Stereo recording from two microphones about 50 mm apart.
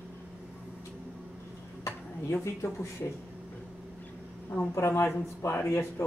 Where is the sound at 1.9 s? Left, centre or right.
Left.